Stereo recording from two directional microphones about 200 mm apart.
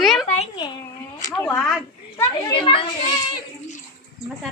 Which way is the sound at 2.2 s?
25° left (ahead or behind).